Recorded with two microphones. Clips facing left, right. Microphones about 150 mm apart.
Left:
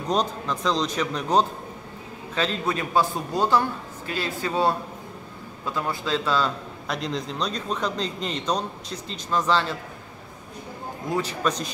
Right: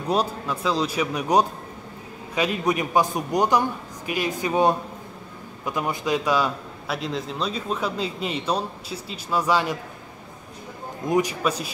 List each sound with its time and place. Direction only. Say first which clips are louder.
0.0 s a man's voice: right 1 dB; 10° right (ahead or behind)
11.1 s a man's voice: right 3 dB; 15° right (ahead or behind)